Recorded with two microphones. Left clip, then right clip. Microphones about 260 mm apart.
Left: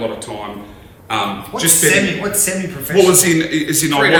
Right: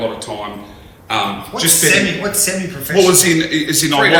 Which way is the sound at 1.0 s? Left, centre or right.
Centre.